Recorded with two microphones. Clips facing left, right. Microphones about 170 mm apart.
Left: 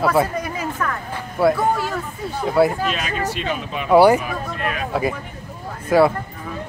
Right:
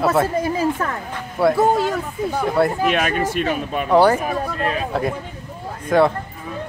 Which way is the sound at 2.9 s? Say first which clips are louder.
Right 5 dB; 55° right (ahead or behind).